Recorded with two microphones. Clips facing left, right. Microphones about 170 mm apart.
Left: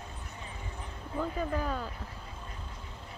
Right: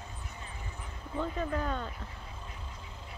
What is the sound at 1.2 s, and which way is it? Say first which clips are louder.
Speech: left 1 dB; 5° left (ahead or behind).